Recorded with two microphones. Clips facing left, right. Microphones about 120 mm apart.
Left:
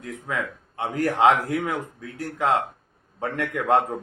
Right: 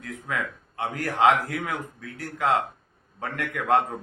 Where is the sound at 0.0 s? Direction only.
25° left (ahead or behind).